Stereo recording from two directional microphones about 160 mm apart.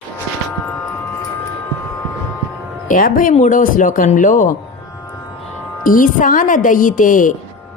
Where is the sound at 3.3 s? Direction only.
55° left (ahead or behind).